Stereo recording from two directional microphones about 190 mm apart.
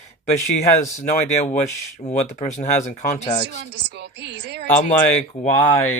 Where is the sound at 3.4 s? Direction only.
60° right (ahead or behind).